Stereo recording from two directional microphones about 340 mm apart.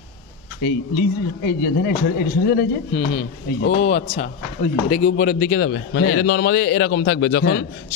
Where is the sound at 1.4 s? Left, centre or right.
Left.